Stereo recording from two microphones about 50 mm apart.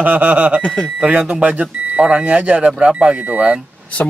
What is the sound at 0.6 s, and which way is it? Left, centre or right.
Speech, left.